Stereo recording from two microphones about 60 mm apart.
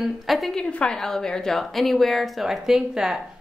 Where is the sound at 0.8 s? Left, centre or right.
Centre.